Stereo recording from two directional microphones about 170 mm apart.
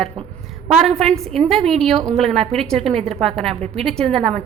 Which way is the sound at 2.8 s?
35° right (ahead or behind).